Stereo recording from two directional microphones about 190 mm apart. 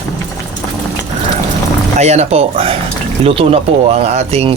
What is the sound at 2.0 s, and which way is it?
Speech, 35° right (ahead or behind).